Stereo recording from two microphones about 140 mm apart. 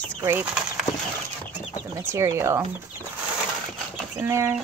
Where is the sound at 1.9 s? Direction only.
20° right (ahead or behind).